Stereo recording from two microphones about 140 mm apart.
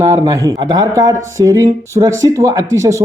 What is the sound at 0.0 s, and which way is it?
Speech, 20° right (ahead or behind).